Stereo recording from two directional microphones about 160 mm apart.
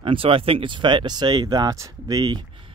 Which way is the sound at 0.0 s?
35° right (ahead or behind).